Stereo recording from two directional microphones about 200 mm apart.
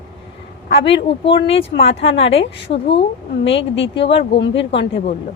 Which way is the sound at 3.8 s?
70° left (ahead or behind).